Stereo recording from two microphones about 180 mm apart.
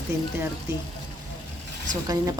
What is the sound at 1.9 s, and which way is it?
Speech, 20° right (ahead or behind).